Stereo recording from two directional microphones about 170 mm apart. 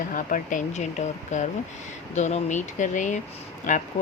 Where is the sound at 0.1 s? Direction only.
50° left (ahead or behind).